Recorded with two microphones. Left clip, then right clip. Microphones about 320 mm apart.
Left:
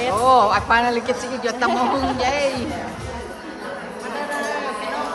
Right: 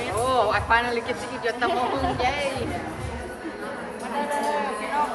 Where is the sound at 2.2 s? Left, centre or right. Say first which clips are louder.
Left 5 dB; centre.